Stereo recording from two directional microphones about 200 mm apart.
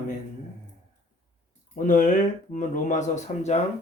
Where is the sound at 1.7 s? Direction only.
40° left (ahead or behind).